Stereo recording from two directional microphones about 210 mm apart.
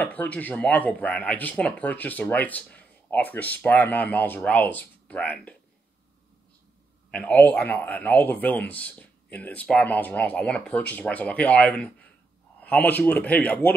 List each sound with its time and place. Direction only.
0.0 s speech: 5° left (ahead or behind)
7.1 s speech: 5° left (ahead or behind)